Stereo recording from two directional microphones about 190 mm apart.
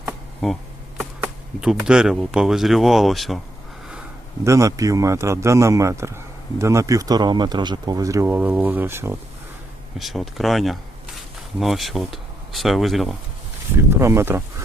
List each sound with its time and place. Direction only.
0.4 s a sound: centre (ahead or behind)
1.2 s speech: 5° right (ahead or behind)
4.4 s a man's voice: 15° right (ahead or behind)
10.0 s speech: centre (ahead or behind)
13.9 s a man's voice: 15° right (ahead or behind)